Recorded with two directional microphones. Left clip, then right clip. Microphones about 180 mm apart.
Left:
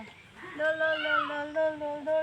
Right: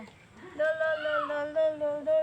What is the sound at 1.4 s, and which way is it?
Humming, 40° right (ahead or behind).